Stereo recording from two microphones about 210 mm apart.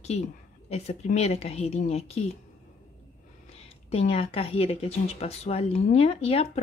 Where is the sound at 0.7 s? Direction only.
30° left (ahead or behind).